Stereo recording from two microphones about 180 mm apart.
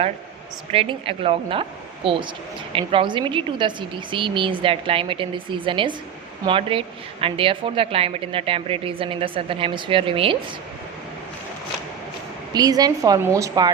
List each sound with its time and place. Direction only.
0.7 s a woman's voice: 30° right (ahead or behind)
2.7 s a woman's voice: 30° right (ahead or behind)
12.5 s a woman's voice: 20° right (ahead or behind)